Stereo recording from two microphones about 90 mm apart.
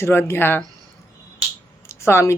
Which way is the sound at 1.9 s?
30° left (ahead or behind).